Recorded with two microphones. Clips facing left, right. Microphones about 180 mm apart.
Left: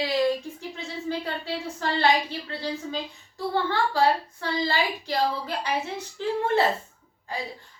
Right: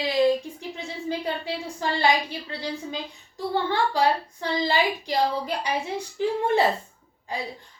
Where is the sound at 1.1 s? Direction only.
15° right (ahead or behind).